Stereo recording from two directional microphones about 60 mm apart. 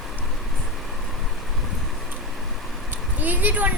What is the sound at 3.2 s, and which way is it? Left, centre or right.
Speech, right.